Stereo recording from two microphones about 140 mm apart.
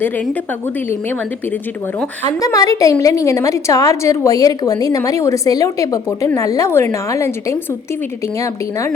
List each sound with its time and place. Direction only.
2.2 s a woman's voice: 25° left (ahead or behind)